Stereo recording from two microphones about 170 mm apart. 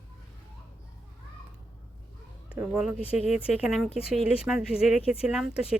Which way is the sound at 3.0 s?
35° left (ahead or behind).